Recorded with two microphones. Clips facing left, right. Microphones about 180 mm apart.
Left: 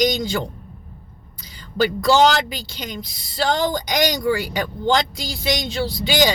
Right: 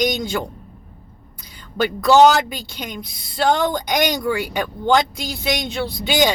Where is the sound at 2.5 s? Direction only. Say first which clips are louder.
Right 1 dB; 55° right (ahead or behind).